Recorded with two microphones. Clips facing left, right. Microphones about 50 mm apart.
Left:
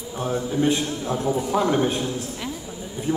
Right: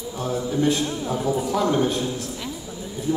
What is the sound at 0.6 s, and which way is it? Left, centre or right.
Speech, left.